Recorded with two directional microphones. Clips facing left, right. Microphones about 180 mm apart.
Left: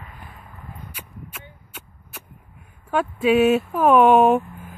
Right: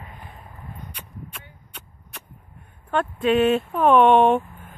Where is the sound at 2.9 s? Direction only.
5° left (ahead or behind).